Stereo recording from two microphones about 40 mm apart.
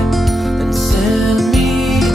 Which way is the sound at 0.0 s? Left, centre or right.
Centre.